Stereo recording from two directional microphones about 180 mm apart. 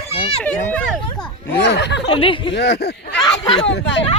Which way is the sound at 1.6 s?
70° left (ahead or behind).